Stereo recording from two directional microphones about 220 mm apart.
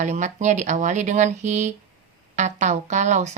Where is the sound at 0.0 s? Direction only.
30° right (ahead or behind).